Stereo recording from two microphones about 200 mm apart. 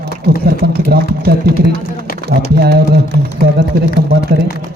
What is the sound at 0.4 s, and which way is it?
Speech, 50° right (ahead or behind).